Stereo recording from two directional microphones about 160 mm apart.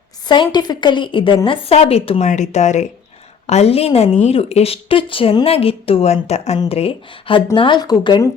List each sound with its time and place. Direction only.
0.3 s a woman's voice: 25° left (ahead or behind)